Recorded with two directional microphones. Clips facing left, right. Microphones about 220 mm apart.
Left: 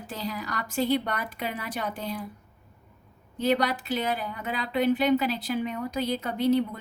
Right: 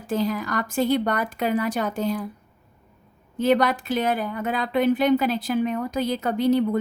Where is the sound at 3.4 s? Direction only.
50° right (ahead or behind).